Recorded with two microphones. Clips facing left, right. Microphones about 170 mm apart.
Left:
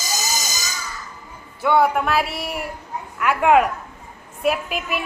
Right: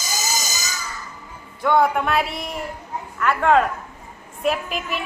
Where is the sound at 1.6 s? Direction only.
5° left (ahead or behind).